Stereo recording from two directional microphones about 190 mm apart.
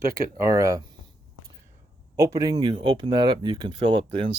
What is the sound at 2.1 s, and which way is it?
Speech, 15° right (ahead or behind).